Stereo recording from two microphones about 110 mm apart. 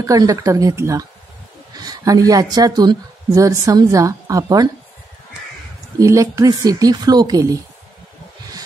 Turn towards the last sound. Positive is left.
turn(degrees=-30)  # may be behind; listen again after turning